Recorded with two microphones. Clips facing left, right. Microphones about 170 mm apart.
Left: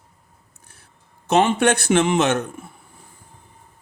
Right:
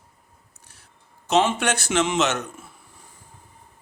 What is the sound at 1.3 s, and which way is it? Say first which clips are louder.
Speech: left 4 dB; 55° left (ahead or behind).